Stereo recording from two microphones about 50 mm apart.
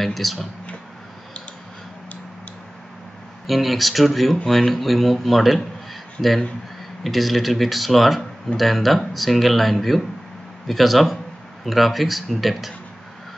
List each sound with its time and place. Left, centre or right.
0.0 s speech: centre
3.4 s speech: centre